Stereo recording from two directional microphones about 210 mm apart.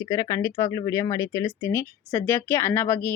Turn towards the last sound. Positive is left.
turn(degrees=10)  # may be behind; listen again after turning